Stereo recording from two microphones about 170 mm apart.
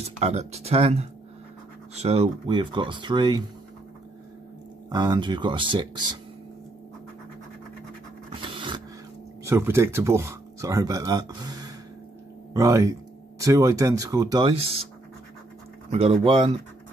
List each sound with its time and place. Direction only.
0.2 s speech: 40° right (ahead or behind)
4.8 s speech: 25° right (ahead or behind)
8.3 s a sound: 25° right (ahead or behind)
9.4 s speech: 15° right (ahead or behind); by 14.9 s 35° right (ahead or behind)
15.9 s speech: 35° right (ahead or behind)